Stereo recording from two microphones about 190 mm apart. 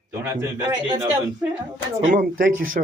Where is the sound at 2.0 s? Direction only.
45° right (ahead or behind).